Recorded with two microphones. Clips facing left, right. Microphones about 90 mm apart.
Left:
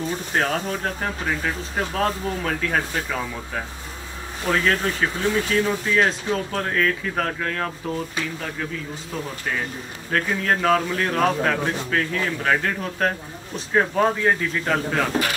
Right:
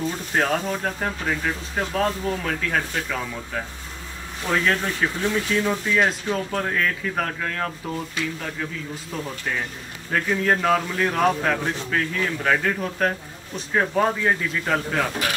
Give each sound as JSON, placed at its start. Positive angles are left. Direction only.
{"t": 0.3, "sound": "speech", "side_deg": 0}
{"t": 10.1, "sound": "speech", "side_deg": 0}